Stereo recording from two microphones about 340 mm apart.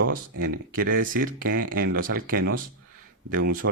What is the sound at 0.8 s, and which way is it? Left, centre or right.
Speech, right.